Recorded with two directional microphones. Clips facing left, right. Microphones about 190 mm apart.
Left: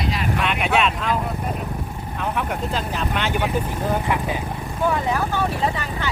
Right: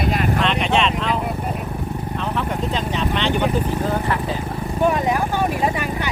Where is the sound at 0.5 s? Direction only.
5° left (ahead or behind).